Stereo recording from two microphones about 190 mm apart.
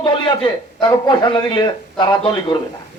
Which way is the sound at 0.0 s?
25° left (ahead or behind).